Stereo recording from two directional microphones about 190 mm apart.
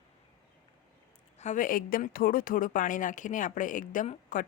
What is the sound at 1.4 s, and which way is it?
Speech, 40° left (ahead or behind).